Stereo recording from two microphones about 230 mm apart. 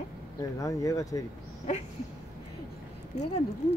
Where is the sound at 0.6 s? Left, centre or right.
Centre.